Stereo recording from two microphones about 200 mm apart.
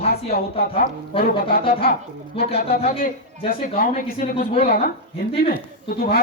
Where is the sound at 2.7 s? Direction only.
45° left (ahead or behind).